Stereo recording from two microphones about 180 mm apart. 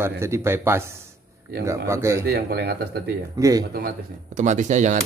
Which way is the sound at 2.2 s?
65° right (ahead or behind).